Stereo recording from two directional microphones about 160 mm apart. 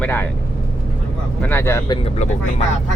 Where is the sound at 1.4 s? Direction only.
15° left (ahead or behind).